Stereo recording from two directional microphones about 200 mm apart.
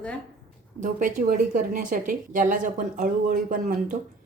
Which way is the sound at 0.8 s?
40° right (ahead or behind).